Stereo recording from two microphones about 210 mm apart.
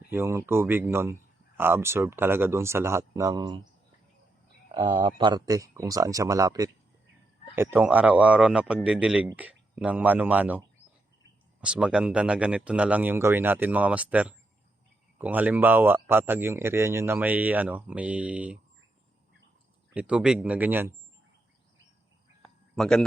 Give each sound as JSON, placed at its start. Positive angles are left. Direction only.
{"t": 0.1, "sound": "a man's voice", "side_deg": -10}
{"t": 4.7, "sound": "a man's voice", "side_deg": -20}
{"t": 11.6, "sound": "a man's voice", "side_deg": -5}
{"t": 19.9, "sound": "speech", "side_deg": -5}
{"t": 22.4, "sound": "a sound", "side_deg": 0}